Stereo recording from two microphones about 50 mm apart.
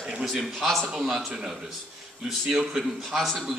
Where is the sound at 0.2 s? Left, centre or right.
Centre.